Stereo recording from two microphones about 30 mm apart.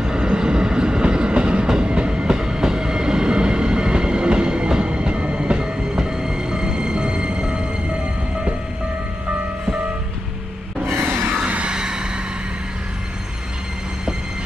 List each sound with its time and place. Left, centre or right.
0.0 s train: right
11.4 s music: right
11.7 s vehicle: right